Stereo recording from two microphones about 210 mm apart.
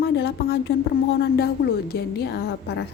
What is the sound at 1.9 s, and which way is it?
Speech, 50° left (ahead or behind).